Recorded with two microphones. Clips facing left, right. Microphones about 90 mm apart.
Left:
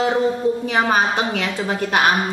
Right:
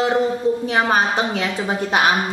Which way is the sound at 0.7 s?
5° right (ahead or behind).